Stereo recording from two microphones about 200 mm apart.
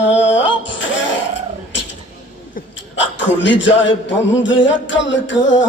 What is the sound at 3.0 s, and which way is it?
A man's voice, 65° left (ahead or behind).